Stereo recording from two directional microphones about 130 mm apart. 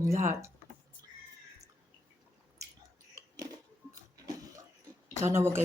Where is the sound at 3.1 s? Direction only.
30° right (ahead or behind).